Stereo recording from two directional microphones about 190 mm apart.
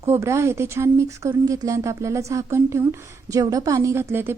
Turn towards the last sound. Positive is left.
turn(degrees=-10)  # may be behind; listen again after turning